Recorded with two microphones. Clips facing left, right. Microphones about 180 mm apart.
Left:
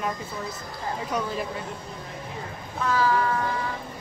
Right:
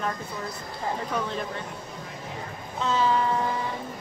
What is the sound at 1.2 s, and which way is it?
Speech, 5° left (ahead or behind).